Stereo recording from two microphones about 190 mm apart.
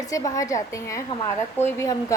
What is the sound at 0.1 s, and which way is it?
A woman's voice, 15° left (ahead or behind).